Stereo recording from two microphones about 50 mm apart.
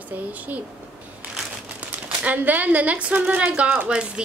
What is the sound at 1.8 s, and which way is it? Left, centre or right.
Speech, right.